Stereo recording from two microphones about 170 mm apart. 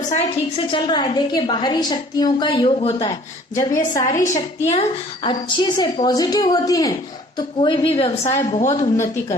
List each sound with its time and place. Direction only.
0.5 s a woman's voice: 30° left (ahead or behind)
4.7 s a woman's voice: 40° left (ahead or behind)
5.3 s a woman's voice: 25° left (ahead or behind)
8.2 s a woman's voice: 15° left (ahead or behind)
8.5 s a woman's voice: 35° left (ahead or behind)